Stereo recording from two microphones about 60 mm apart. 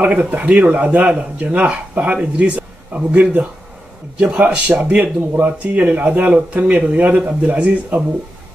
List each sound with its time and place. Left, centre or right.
0.0 s a man's voice: right